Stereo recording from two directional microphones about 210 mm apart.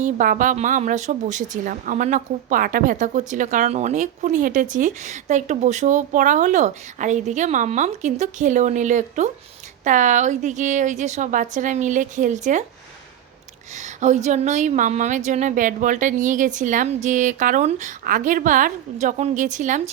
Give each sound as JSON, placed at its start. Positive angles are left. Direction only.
{"t": 0.0, "sound": "a woman's voice", "side_deg": -40}
{"t": 13.7, "sound": "a woman's voice", "side_deg": -35}